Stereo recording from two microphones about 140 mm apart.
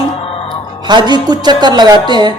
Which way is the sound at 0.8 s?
30° right (ahead or behind).